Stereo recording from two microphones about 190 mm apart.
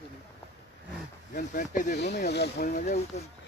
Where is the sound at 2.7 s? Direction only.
35° left (ahead or behind).